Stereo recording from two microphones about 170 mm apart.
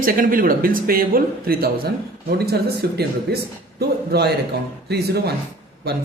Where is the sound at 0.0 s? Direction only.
55° right (ahead or behind).